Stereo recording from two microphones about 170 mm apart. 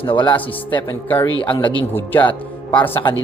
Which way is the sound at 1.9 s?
10° left (ahead or behind).